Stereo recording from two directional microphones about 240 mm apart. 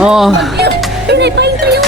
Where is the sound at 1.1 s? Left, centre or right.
Right.